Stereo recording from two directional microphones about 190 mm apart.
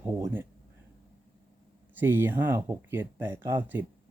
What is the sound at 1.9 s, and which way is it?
Speech, 10° right (ahead or behind).